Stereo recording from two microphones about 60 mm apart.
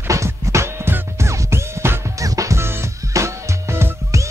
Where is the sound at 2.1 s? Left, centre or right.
Right.